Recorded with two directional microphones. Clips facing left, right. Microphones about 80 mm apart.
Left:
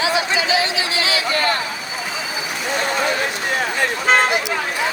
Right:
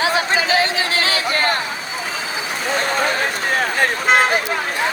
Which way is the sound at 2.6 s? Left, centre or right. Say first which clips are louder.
Right 1 dB; right.